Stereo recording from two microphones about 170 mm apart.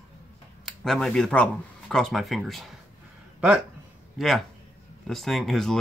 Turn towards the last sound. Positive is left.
turn(degrees=0)  # may be behind; listen again after turning